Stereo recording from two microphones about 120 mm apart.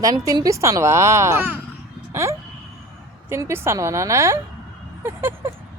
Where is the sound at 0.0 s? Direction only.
30° right (ahead or behind).